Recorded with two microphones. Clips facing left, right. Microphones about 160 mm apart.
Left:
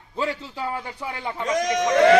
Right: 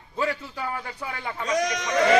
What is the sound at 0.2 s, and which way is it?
A man's voice, 25° left (ahead or behind).